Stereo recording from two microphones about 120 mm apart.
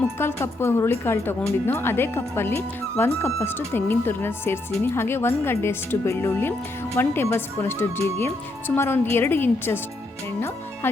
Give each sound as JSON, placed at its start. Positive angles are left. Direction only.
{"t": 0.2, "sound": "a woman's voice", "side_deg": 20}